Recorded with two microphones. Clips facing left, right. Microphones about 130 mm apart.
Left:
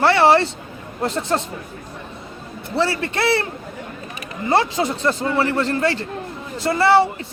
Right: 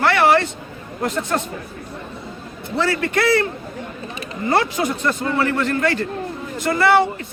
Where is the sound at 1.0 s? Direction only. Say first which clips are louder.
Left 1 dB; 30° left (ahead or behind).